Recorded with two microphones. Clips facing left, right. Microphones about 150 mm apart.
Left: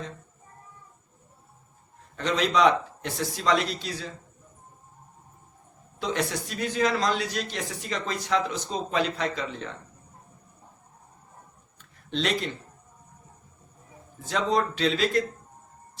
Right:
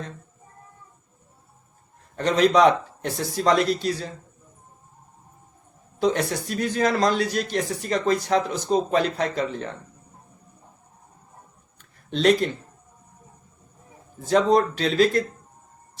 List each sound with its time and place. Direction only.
2.1 s a man's voice: 45° right (ahead or behind)
6.0 s a man's voice: 45° right (ahead or behind)
12.1 s a man's voice: 45° right (ahead or behind)
14.3 s a man's voice: 45° right (ahead or behind)